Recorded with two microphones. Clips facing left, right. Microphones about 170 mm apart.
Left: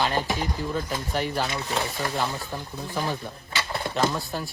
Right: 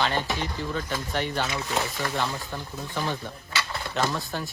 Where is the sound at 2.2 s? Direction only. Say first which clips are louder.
Left 1 dB; 15° left (ahead or behind).